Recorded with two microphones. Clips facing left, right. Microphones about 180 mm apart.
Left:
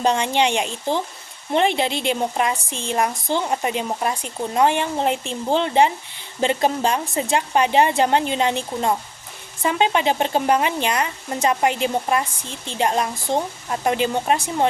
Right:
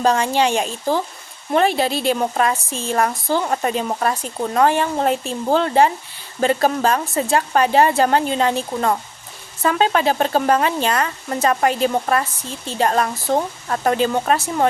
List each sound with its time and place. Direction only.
0.0 s a woman's voice: 20° left (ahead or behind)